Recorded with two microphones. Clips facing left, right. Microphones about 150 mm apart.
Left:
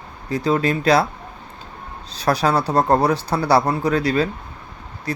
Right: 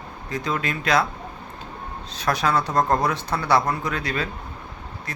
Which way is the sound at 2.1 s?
35° left (ahead or behind).